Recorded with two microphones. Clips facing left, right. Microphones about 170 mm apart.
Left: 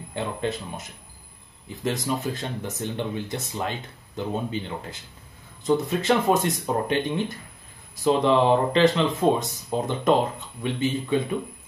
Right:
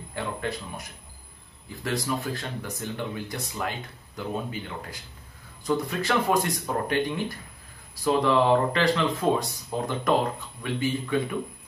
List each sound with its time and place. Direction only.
0.1 s speech: 20° left (ahead or behind)